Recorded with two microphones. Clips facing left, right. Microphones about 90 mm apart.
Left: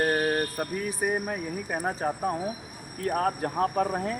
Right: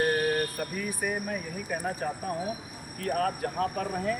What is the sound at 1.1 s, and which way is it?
Speech, 35° left (ahead or behind).